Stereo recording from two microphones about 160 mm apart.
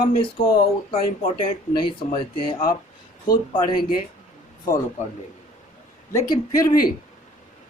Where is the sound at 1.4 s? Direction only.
30° left (ahead or behind).